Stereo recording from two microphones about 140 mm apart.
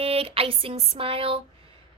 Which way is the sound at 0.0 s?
45° right (ahead or behind).